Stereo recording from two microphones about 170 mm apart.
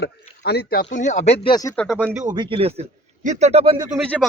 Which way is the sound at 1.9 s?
10° right (ahead or behind).